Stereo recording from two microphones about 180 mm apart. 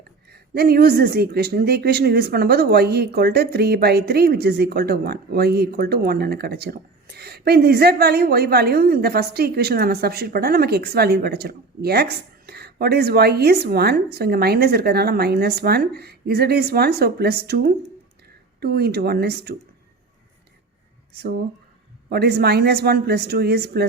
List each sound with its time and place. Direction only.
0.3 s speech: 60° right (ahead or behind)
21.1 s speech: 60° right (ahead or behind)